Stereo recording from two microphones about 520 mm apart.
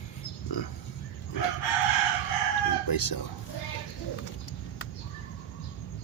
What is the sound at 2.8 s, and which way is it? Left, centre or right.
Speech, left.